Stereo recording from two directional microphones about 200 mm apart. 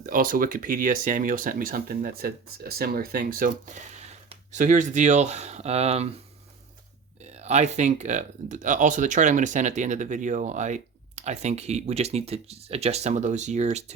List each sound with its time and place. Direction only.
0.0 s speech: 45° right (ahead or behind)
7.3 s speech: 35° right (ahead or behind)